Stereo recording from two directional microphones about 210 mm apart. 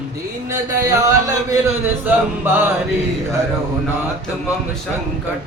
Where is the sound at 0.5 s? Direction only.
15° right (ahead or behind).